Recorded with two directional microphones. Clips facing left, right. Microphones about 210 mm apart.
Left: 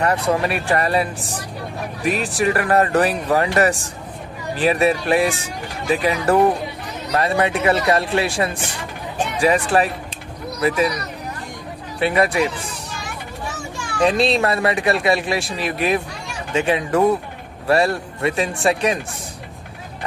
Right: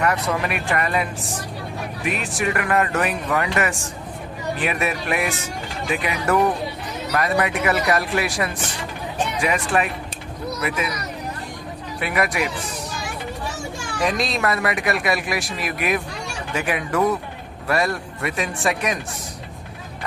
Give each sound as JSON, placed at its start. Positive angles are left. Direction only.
{"t": 0.0, "sound": "a child's voice", "side_deg": 30}
{"t": 11.9, "sound": "speech", "side_deg": 30}
{"t": 14.0, "sound": "speech", "side_deg": 30}